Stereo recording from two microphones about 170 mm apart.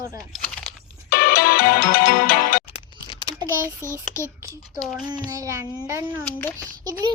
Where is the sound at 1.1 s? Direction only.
65° left (ahead or behind).